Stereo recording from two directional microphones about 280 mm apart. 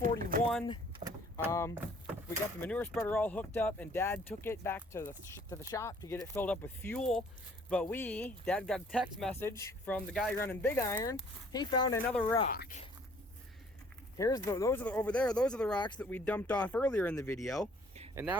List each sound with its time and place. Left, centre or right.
0.0 s a sound: right
1.0 s vehicle: right
2.6 s speech: centre
12.2 s speech: centre
12.5 s speech: left
14.2 s speech: centre